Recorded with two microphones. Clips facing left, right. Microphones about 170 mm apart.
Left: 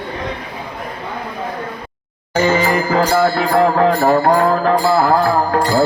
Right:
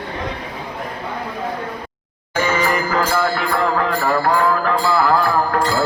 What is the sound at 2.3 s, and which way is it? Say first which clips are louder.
Music: left 4 dB; 35° left (ahead or behind).